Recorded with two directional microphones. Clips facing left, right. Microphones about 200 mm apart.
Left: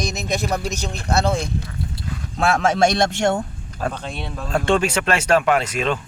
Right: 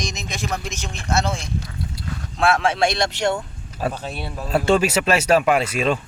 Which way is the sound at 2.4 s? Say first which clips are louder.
Left 1 dB; 40° left (ahead or behind).